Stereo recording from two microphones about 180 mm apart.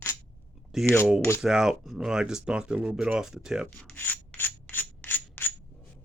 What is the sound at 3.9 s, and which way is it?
Rub, 10° left (ahead or behind).